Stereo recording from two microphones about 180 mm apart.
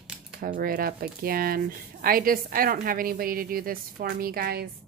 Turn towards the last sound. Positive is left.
turn(degrees=-60)  # may be behind; listen again after turning